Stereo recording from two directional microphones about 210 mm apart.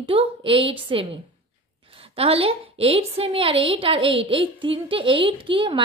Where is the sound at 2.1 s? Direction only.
30° right (ahead or behind).